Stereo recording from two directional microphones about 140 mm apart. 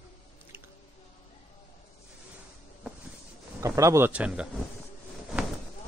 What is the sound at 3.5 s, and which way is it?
Speech, 20° right (ahead or behind).